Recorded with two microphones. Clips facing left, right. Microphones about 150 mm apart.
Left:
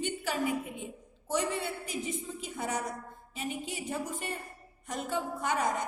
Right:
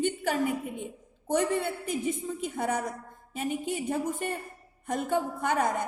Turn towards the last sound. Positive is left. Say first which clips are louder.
# right 3 dB
turn(degrees=-55)  # may be behind; listen again after turning